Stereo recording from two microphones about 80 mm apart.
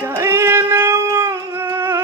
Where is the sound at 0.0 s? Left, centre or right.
Right.